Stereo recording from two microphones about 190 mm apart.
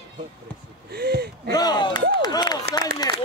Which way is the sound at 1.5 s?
20° left (ahead or behind).